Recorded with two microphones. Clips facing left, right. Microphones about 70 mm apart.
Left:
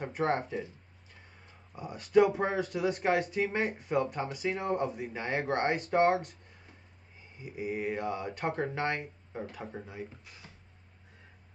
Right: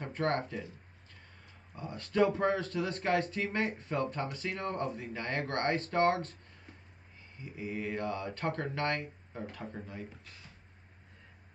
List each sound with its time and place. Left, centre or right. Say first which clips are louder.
0.0 s speech: left 2 dB; centre
1.8 s speech: left 5 dB; centre
7.3 s speech: left 4 dB; centre